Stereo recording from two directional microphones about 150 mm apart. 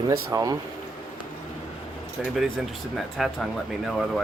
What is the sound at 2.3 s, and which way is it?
Speech, centre (ahead or behind).